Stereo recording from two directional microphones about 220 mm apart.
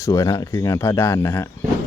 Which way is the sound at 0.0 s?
15° left (ahead or behind).